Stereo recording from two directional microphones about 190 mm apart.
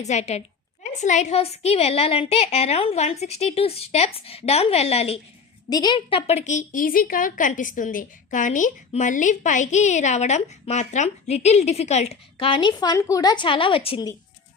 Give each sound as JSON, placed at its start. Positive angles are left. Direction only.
{"t": 0.0, "sound": "a woman's voice", "side_deg": 35}
{"t": 5.6, "sound": "a woman's voice", "side_deg": 20}